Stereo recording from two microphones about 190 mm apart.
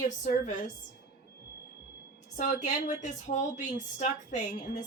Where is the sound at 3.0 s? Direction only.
40° left (ahead or behind).